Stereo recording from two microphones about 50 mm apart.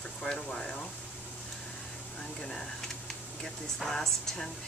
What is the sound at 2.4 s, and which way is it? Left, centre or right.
Speech, centre.